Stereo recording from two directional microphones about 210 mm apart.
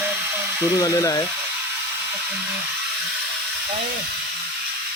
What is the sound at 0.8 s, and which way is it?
Speech, 15° left (ahead or behind).